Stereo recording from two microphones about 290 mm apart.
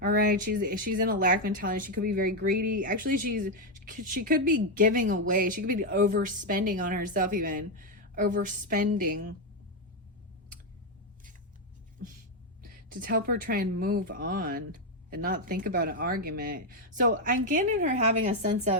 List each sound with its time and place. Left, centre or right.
0.0 s speech: right
12.6 s speech: right